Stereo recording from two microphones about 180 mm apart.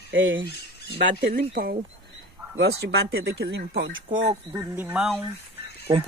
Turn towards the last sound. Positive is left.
turn(degrees=-15)  # may be behind; listen again after turning